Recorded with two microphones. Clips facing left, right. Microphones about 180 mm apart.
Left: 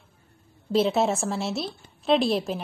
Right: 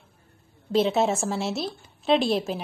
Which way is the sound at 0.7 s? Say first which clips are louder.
Even; centre (ahead or behind).